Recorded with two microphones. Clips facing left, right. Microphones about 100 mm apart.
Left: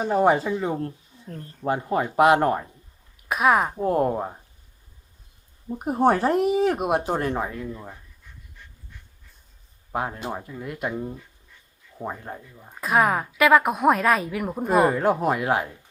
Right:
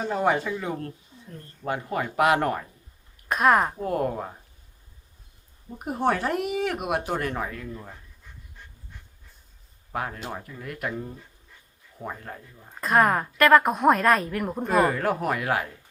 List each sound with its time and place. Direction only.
0.0 s speech: 20° left (ahead or behind)
3.2 s speech: 5° left (ahead or behind)
3.8 s speech: 25° left (ahead or behind)
5.8 s speech: 30° left (ahead or behind)
9.9 s speech: 25° left (ahead or behind)
12.5 s a woman's voice: 5° left (ahead or behind)
14.8 s speech: 20° left (ahead or behind)